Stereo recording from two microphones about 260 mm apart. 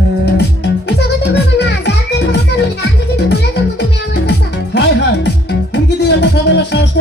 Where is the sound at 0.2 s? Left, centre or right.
Left.